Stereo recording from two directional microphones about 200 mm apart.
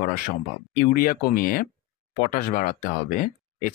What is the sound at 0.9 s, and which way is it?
Speech, 45° left (ahead or behind).